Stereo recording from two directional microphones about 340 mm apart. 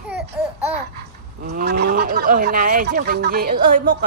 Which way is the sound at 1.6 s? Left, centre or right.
Right.